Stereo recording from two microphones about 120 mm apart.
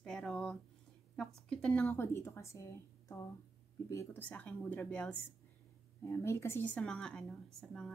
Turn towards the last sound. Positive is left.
turn(degrees=5)  # may be behind; listen again after turning